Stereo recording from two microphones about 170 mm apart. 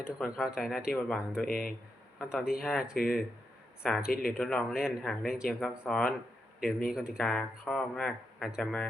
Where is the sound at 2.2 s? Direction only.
5° right (ahead or behind).